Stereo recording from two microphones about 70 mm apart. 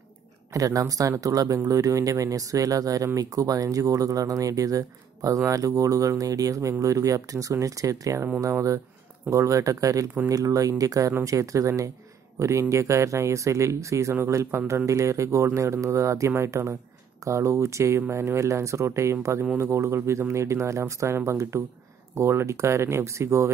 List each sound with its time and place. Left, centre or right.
0.5 s speech: right